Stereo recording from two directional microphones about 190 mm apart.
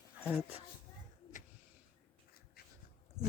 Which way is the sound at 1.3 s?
40° left (ahead or behind).